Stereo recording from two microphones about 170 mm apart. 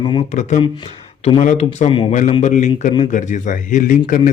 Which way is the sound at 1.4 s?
50° left (ahead or behind).